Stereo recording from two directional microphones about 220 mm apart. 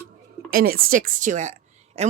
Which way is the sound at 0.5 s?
40° right (ahead or behind).